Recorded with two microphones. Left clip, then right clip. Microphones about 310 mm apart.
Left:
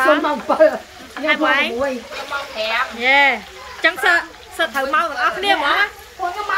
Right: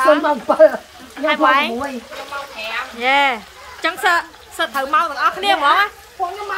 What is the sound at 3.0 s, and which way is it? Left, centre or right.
A woman's voice, centre.